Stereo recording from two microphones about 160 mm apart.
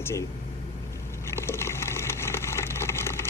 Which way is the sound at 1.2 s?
15° left (ahead or behind).